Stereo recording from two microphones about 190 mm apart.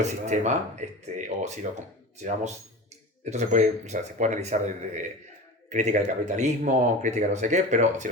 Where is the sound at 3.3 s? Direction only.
40° right (ahead or behind).